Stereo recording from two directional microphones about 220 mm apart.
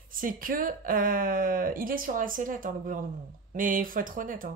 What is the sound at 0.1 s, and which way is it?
Speech, 40° right (ahead or behind).